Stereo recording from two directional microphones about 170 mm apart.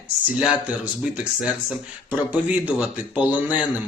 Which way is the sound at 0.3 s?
5° right (ahead or behind).